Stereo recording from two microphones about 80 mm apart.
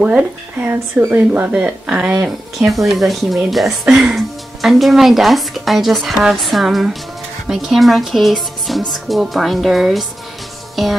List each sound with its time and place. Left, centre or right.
0.0 s speech: centre
2.7 s speech: centre